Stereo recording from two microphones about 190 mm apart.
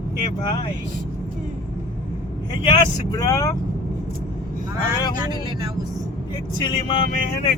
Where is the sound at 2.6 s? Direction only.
20° left (ahead or behind).